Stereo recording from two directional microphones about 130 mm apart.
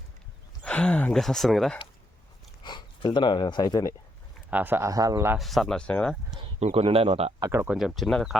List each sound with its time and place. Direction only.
0.6 s a sound: 10° left (ahead or behind)
1.2 s speech: centre (ahead or behind)
2.6 s speech: 35° left (ahead or behind)
4.5 s a man's voice: 15° right (ahead or behind)
5.4 s speech: centre (ahead or behind)
6.6 s speech: 55° right (ahead or behind)
7.3 s speech: 30° right (ahead or behind)
7.8 s speech: centre (ahead or behind)